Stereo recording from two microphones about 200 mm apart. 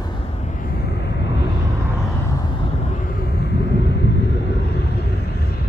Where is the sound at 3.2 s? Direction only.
55° left (ahead or behind).